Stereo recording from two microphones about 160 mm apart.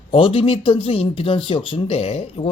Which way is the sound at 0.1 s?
35° left (ahead or behind).